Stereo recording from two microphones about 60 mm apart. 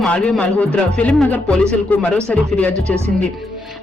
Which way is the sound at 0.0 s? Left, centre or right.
Centre.